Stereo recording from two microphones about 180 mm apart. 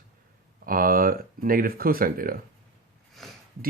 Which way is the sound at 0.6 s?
50° right (ahead or behind).